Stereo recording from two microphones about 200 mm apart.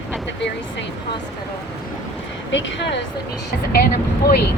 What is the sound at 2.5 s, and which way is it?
Speech, 65° left (ahead or behind).